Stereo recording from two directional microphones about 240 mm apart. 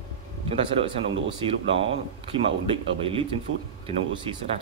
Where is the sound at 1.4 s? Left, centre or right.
Right.